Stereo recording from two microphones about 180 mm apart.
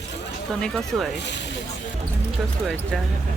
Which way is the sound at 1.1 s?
75° left (ahead or behind).